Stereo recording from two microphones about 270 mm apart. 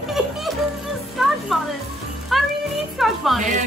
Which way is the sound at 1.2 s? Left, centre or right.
Centre.